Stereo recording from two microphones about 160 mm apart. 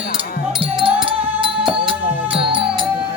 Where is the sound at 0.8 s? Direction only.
35° right (ahead or behind).